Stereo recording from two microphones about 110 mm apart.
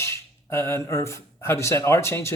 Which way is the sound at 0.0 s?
25° left (ahead or behind).